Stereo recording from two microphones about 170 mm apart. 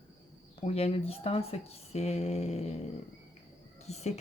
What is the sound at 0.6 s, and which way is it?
Speech, 35° left (ahead or behind).